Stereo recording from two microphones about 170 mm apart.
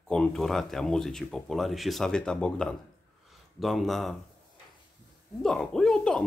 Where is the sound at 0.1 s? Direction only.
5° left (ahead or behind).